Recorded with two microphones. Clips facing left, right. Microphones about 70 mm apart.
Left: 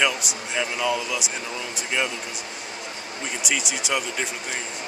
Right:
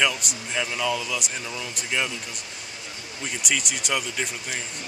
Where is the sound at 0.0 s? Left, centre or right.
Centre.